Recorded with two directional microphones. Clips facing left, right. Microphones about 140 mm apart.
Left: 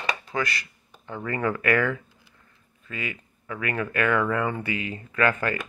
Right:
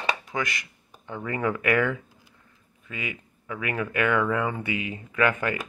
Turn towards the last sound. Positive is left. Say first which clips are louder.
# even
turn(degrees=-15)  # may be behind; listen again after turning